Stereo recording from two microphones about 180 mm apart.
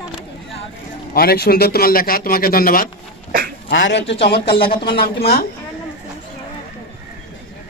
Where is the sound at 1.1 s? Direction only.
60° left (ahead or behind).